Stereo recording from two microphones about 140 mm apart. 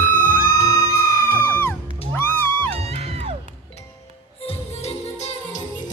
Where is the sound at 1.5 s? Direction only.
15° left (ahead or behind).